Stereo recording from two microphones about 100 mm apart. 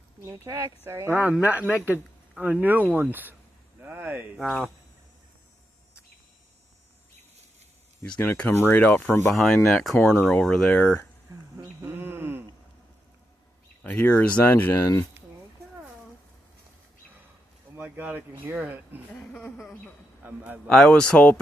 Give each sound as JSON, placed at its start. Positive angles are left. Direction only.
{"t": 0.2, "sound": "speech", "side_deg": -30}
{"t": 4.4, "sound": "speech", "side_deg": 10}
{"t": 8.2, "sound": "speech", "side_deg": 20}
{"t": 9.3, "sound": "speech", "side_deg": 0}
{"t": 11.5, "sound": "a sound", "side_deg": -25}
{"t": 13.8, "sound": "speech", "side_deg": 15}
{"t": 17.7, "sound": "speech", "side_deg": -15}
{"t": 20.2, "sound": "speech", "side_deg": -15}
{"t": 20.7, "sound": "speech", "side_deg": 5}